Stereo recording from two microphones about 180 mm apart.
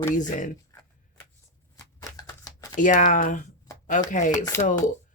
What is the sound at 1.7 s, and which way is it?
Shuffling cards, 20° left (ahead or behind).